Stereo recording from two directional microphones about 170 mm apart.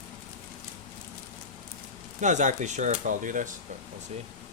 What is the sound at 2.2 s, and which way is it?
Speech, 45° right (ahead or behind).